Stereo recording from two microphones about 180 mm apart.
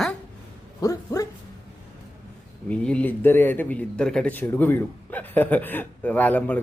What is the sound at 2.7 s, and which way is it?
A man's voice, 5° left (ahead or behind).